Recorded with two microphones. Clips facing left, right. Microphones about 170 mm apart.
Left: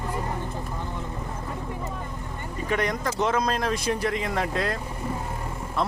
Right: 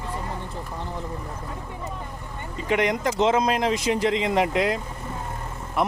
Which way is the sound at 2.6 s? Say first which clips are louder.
Right 4 dB; 20° right (ahead or behind).